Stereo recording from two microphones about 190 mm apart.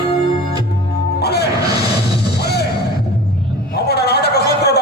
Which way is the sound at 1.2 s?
60° left (ahead or behind).